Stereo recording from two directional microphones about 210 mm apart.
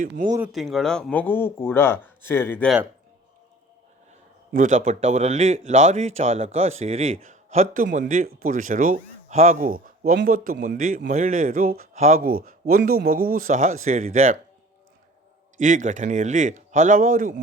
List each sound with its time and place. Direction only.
0.0 s speech: 40° right (ahead or behind)
0.3 s speech: 5° right (ahead or behind)
4.5 s speech: 40° right (ahead or behind)
15.5 s speech: 35° right (ahead or behind)